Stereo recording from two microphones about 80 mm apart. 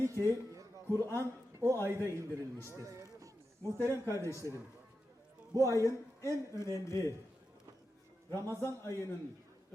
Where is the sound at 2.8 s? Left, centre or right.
Right.